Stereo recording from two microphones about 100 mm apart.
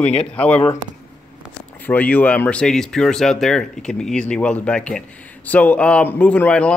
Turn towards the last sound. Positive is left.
turn(degrees=15)  # may be behind; listen again after turning